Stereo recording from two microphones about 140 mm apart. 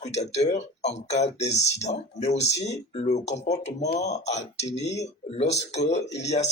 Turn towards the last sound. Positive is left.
turn(degrees=50)  # may be behind; listen again after turning